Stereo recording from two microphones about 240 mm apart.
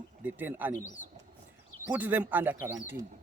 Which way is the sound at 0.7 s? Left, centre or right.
Left.